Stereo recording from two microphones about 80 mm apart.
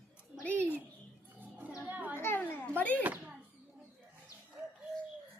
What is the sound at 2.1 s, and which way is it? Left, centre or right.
Children playing, left.